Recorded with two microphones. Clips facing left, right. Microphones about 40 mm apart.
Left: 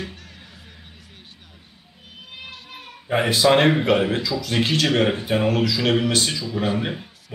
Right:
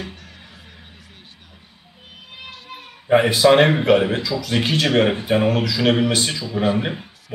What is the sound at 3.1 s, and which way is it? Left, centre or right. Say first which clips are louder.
Speech: right 6 dB; centre.